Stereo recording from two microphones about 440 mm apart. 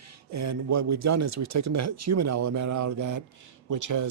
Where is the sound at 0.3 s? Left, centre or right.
Right.